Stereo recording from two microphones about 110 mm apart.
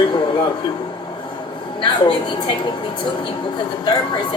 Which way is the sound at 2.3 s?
45° left (ahead or behind).